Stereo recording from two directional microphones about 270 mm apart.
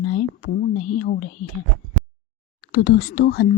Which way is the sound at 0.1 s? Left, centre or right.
Left.